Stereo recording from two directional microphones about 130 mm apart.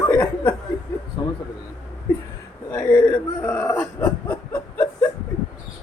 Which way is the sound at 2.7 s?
15° left (ahead or behind).